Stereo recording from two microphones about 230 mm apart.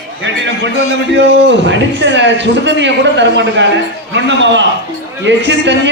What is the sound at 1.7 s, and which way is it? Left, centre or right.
A man's voice, right.